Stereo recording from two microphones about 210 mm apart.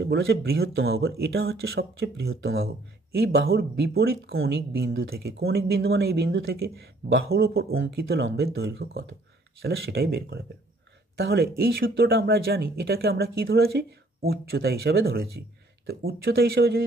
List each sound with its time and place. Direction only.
0.0 s speech: 50° right (ahead or behind)